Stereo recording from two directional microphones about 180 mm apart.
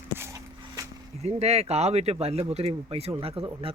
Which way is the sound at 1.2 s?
35° right (ahead or behind).